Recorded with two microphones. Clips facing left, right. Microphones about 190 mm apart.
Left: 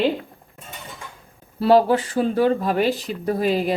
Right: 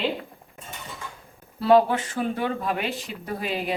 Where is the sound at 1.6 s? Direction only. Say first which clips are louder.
Left 3 dB; 35° left (ahead or behind).